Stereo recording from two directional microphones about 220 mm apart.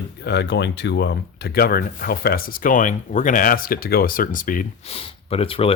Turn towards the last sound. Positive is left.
turn(degrees=25)  # may be behind; listen again after turning